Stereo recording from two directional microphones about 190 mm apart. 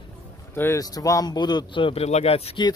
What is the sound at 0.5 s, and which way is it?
A man's voice, 15° left (ahead or behind).